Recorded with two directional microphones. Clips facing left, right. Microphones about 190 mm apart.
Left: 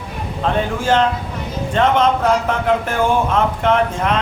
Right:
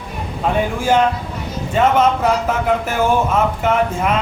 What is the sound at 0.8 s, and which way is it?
Speech, 10° right (ahead or behind).